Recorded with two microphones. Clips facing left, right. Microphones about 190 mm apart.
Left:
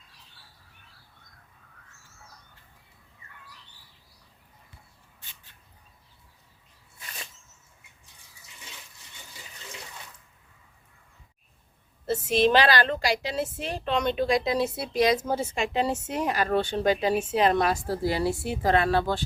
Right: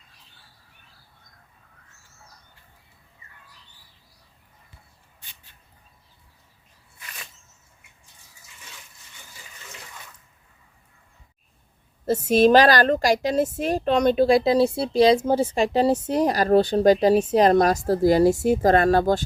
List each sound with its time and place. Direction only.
12.0 s a woman's voice: 40° right (ahead or behind)